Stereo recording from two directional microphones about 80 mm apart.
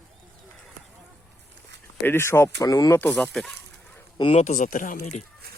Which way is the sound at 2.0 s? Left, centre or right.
Left.